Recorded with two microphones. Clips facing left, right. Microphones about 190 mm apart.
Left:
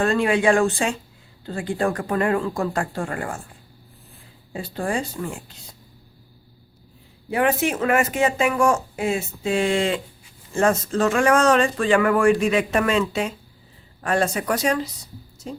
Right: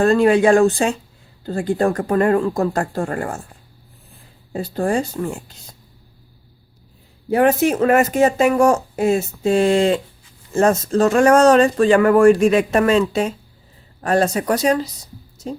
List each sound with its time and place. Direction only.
0.0 s speech: 40° right (ahead or behind)
4.5 s speech: 40° right (ahead or behind)
7.3 s speech: 40° right (ahead or behind)